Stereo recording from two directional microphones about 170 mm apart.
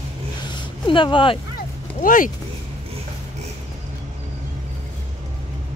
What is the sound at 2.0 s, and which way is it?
Speech, 50° left (ahead or behind).